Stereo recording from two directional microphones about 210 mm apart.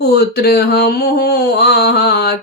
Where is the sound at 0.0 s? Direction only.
50° left (ahead or behind).